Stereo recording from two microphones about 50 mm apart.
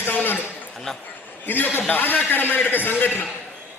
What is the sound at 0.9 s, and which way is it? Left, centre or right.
Speech, centre.